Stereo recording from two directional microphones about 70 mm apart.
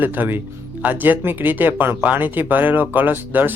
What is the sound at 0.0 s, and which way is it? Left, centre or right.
Speech, right.